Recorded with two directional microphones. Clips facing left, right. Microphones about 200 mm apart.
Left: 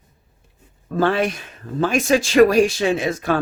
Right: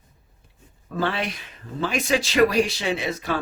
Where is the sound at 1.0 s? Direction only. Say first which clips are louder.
Left 7 dB; 45° left (ahead or behind).